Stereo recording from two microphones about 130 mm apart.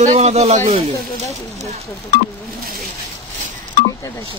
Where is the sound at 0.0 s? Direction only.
60° right (ahead or behind).